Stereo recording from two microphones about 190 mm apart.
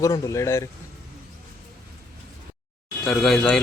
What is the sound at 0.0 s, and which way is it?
Speech, 15° left (ahead or behind).